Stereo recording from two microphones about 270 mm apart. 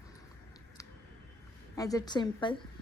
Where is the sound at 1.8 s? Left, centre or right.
Centre.